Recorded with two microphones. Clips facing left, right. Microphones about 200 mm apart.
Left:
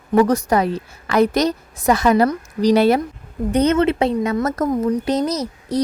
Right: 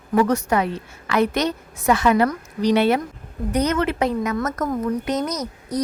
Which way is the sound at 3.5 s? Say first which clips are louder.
Left 5 dB; 25° left (ahead or behind).